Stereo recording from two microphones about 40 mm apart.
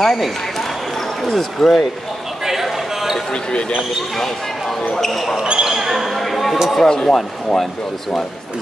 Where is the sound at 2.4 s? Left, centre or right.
Centre.